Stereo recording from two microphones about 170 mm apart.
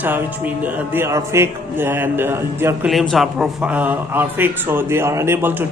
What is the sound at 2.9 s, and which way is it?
Speech, centre (ahead or behind).